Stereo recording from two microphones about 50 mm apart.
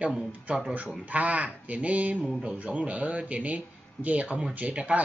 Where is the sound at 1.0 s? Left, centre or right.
Right.